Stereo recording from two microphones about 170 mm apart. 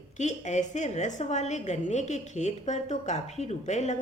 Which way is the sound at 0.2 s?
45° left (ahead or behind).